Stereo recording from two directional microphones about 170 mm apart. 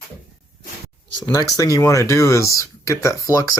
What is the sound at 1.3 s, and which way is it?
Speech, 20° left (ahead or behind).